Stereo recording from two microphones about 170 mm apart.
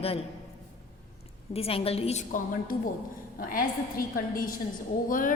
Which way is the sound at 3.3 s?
55° left (ahead or behind).